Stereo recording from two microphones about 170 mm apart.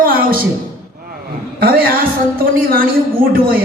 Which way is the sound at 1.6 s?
60° right (ahead or behind).